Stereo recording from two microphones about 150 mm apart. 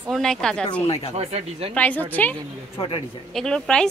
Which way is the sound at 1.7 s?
10° left (ahead or behind).